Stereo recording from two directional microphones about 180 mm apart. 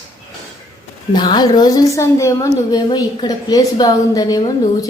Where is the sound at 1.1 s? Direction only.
25° left (ahead or behind).